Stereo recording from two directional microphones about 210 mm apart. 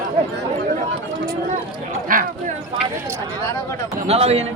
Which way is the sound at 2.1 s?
40° right (ahead or behind).